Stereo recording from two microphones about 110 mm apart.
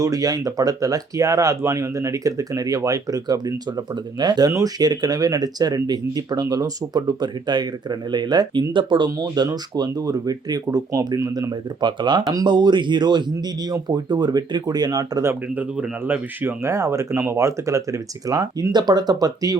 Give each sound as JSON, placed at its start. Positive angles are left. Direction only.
{"t": 0.0, "sound": "speech", "side_deg": -30}
{"t": 11.8, "sound": "speech", "side_deg": -45}
{"t": 15.3, "sound": "speech", "side_deg": -15}